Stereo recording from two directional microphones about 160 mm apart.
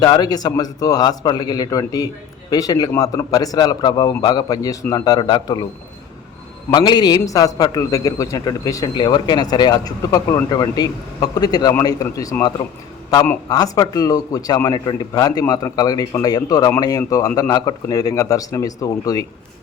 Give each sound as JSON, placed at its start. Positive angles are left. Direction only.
{"t": 0.0, "sound": "a man's voice", "side_deg": 25}
{"t": 6.7, "sound": "a man's voice", "side_deg": 30}